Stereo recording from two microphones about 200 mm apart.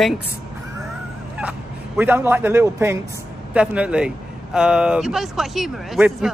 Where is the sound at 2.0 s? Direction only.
10° right (ahead or behind).